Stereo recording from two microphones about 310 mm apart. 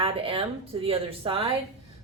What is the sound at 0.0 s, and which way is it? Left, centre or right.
A woman's voice, centre.